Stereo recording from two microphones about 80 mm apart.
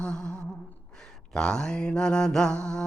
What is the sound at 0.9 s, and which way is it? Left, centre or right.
Mantra, centre.